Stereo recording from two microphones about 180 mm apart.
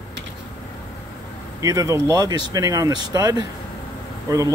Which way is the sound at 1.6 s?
20° right (ahead or behind).